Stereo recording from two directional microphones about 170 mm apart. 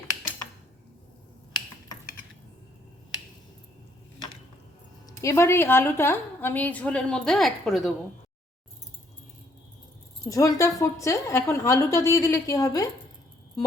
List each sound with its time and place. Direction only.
5.0 s a woman's voice: 20° left (ahead or behind); by 7.9 s centre (ahead or behind)
10.2 s a woman's voice: 20° left (ahead or behind)